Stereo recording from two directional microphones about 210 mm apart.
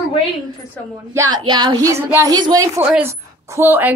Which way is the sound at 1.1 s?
15° right (ahead or behind).